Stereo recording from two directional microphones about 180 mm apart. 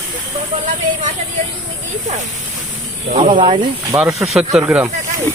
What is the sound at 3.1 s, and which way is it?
Speech, 35° right (ahead or behind).